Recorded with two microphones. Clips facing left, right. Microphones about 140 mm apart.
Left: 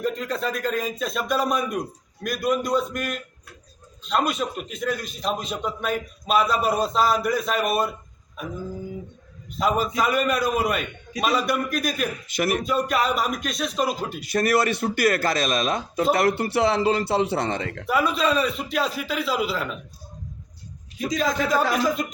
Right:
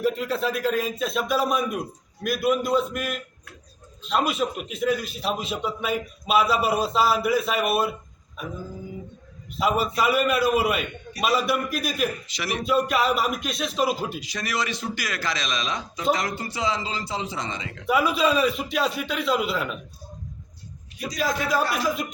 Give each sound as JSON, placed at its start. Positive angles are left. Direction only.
{"t": 0.0, "sound": "a man's voice", "side_deg": -5}
{"t": 9.6, "sound": "a man's voice", "side_deg": -5}
{"t": 12.3, "sound": "speech", "side_deg": 50}
{"t": 12.6, "sound": "a man's voice", "side_deg": 0}
{"t": 14.2, "sound": "speech", "side_deg": 55}
{"t": 16.1, "sound": "speech", "side_deg": 65}
{"t": 17.8, "sound": "a man's voice", "side_deg": 0}
{"t": 21.2, "sound": "a man's voice", "side_deg": -5}